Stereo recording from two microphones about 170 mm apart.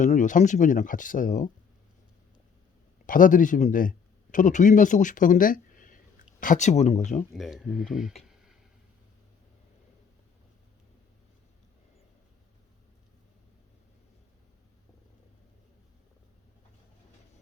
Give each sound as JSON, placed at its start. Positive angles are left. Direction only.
{"t": 0.0, "sound": "speech", "side_deg": 45}
{"t": 3.1, "sound": "speech", "side_deg": 50}
{"t": 7.3, "sound": "speech", "side_deg": 0}